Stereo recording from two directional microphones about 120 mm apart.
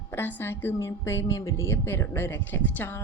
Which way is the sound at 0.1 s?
20° left (ahead or behind).